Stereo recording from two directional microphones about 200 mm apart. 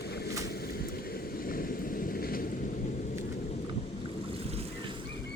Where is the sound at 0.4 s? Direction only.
50° left (ahead or behind).